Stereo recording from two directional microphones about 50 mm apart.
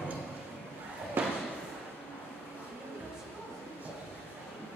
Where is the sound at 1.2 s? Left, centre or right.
Right.